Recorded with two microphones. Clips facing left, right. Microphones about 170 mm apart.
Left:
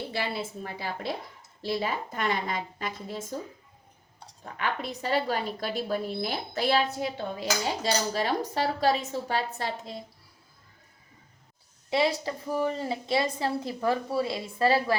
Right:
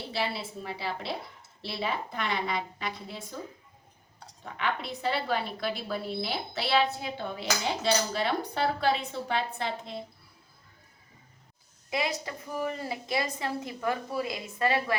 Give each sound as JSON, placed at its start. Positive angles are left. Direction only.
{"t": 0.3, "sound": "a woman's voice", "side_deg": 45}
{"t": 4.5, "sound": "a woman's voice", "side_deg": 40}
{"t": 11.9, "sound": "a woman's voice", "side_deg": 30}